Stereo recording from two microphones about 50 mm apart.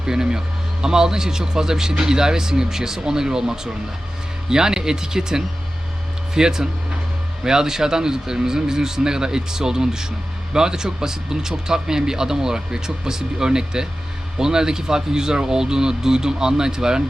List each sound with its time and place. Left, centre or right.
0.0 s speech: centre